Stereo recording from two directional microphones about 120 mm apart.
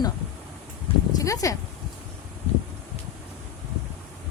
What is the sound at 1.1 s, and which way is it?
Speech, 25° left (ahead or behind).